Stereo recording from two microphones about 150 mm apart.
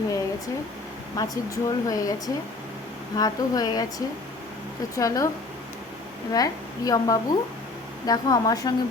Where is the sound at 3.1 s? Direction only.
25° left (ahead or behind).